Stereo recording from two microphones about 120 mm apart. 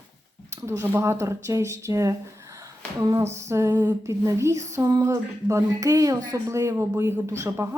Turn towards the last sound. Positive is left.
turn(degrees=-25)  # may be behind; listen again after turning